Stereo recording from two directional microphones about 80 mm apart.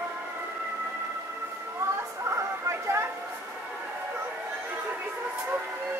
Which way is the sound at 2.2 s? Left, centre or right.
Right.